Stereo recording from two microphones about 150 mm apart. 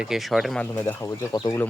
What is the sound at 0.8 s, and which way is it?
Speech, 15° left (ahead or behind).